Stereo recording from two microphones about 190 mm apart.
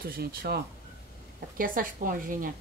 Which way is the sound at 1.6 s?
45° right (ahead or behind).